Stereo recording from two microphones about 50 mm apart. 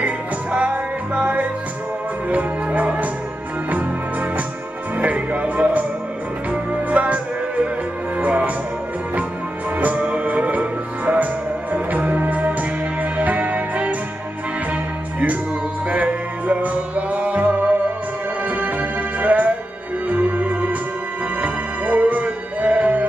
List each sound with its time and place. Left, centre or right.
0.0 s music: right
4.9 s music: right
8.2 s music: right
9.8 s music: right